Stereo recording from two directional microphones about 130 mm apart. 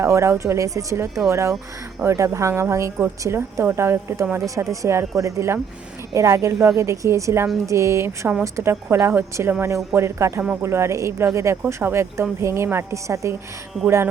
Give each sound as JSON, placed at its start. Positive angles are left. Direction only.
{"t": 0.0, "sound": "a woman's voice", "side_deg": -20}